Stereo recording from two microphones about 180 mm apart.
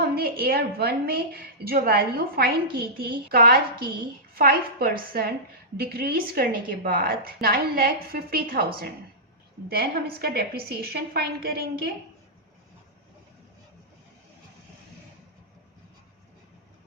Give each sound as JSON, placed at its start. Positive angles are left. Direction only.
{"t": 0.1, "sound": "a woman's voice", "side_deg": -60}